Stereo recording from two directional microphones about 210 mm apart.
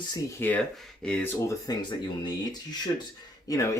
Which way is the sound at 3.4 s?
15° left (ahead or behind).